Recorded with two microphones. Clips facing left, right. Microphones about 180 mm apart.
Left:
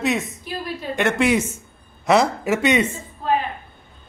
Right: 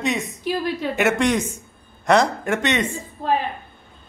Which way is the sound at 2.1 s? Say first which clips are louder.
Even; 5° left (ahead or behind).